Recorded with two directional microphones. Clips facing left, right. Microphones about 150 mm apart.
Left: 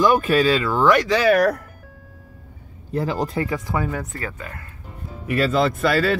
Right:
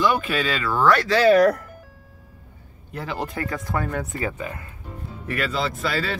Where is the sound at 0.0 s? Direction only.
45° left (ahead or behind).